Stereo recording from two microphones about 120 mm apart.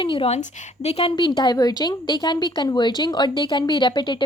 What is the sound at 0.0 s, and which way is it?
Speech, 45° left (ahead or behind).